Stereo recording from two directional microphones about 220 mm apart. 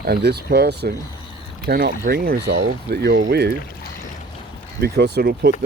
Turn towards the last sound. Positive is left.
turn(degrees=-50)  # may be behind; listen again after turning